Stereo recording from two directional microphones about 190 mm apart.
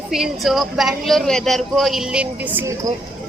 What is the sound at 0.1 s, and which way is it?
Speech, centre (ahead or behind).